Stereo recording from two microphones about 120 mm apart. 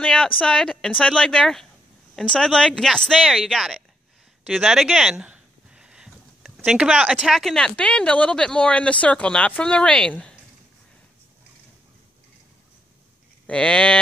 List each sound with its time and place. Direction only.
0.0 s speech: 10° left (ahead or behind)
4.5 s a sound: 5° right (ahead or behind)
7.2 s speech: centre (ahead or behind)
13.5 s speech: 10° left (ahead or behind)